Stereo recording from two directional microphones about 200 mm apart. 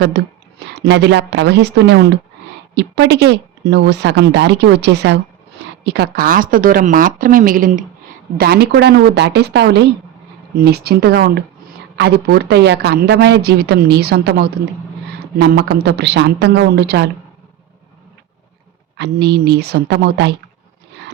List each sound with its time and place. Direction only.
0.7 s a man's voice: 60° right (ahead or behind); by 7.9 s 40° right (ahead or behind)
8.4 s a man's voice: 50° right (ahead or behind)
18.9 s a man's voice: 55° right (ahead or behind)